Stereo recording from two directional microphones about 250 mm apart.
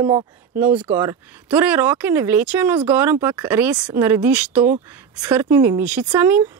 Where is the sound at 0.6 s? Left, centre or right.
Centre.